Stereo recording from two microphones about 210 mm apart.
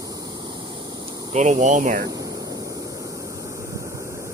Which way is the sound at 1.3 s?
35° right (ahead or behind).